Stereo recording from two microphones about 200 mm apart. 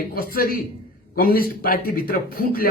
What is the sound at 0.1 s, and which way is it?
Speech, 45° left (ahead or behind).